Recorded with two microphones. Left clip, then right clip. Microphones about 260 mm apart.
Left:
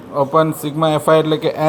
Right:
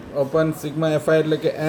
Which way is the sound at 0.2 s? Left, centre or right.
Centre.